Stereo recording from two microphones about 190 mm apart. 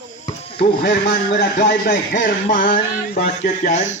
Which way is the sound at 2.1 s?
45° left (ahead or behind).